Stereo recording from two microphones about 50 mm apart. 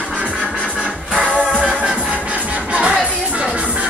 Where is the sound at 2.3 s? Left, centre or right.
Right.